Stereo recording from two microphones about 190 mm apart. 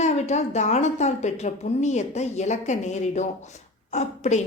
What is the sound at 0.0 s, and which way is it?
A woman's voice, 35° left (ahead or behind).